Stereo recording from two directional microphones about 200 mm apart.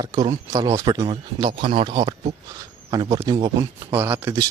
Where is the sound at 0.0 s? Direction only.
20° right (ahead or behind).